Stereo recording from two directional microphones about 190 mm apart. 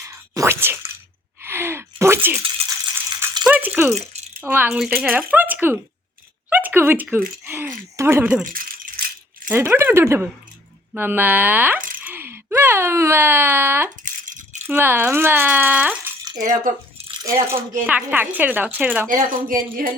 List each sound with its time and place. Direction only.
0.0 s a sound: 15° right (ahead or behind)
1.4 s gasp: 10° right (ahead or behind)
2.4 s rattle: 30° right (ahead or behind)
3.4 s rattle: 10° right (ahead or behind)
4.4 s a woman's voice: 10° right (ahead or behind)
8.5 s rattle: 50° right (ahead or behind)
9.5 s a woman's voice: 10° right (ahead or behind)
14.0 s rattle: 40° right (ahead or behind)
14.7 s a woman's voice: 10° right (ahead or behind)
17.5 s a woman's voice: 10° right (ahead or behind)
19.0 s speech: 45° right (ahead or behind)